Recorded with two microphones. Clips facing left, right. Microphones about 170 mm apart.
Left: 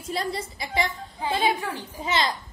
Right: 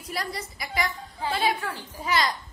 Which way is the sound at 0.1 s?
25° left (ahead or behind).